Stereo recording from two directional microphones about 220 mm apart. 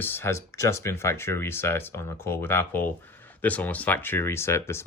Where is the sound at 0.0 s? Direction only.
10° left (ahead or behind).